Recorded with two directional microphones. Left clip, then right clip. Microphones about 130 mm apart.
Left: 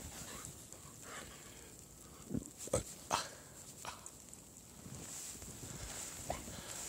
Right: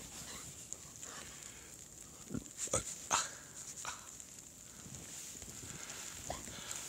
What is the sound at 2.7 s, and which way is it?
Dog, 25° left (ahead or behind).